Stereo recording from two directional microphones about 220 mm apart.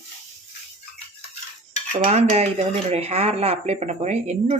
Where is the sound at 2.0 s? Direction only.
30° right (ahead or behind).